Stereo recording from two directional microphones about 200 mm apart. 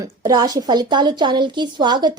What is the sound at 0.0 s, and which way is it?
A woman's voice, 20° right (ahead or behind).